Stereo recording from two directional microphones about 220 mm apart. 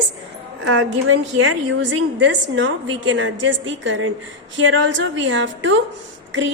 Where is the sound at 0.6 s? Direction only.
65° right (ahead or behind).